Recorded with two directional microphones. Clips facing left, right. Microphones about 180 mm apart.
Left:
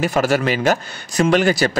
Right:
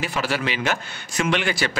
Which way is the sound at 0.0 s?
45° left (ahead or behind).